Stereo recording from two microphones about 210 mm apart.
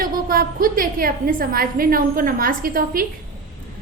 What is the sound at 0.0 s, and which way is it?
A woman's voice, 45° right (ahead or behind).